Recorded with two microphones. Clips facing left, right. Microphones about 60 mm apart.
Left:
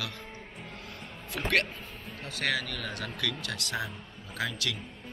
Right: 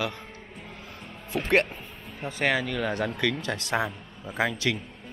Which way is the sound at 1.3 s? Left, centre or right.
Right.